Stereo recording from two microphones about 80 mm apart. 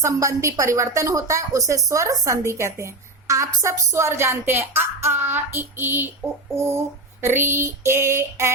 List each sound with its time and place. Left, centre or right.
0.0 s a woman's voice: right